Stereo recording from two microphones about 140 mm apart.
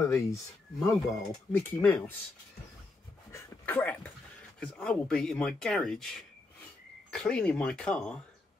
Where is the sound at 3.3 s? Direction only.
15° left (ahead or behind).